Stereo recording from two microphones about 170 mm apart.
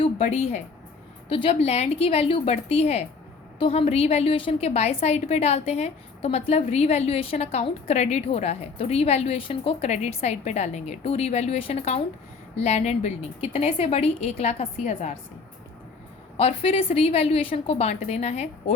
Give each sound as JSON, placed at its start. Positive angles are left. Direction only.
{"t": 0.0, "sound": "a woman's voice", "side_deg": 40}
{"t": 16.4, "sound": "a woman's voice", "side_deg": 35}